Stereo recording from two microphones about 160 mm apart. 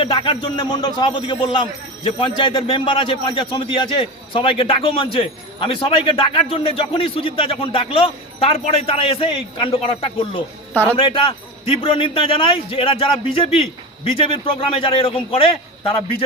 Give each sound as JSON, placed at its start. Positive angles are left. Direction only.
{"t": 0.0, "sound": "a man's voice", "side_deg": 35}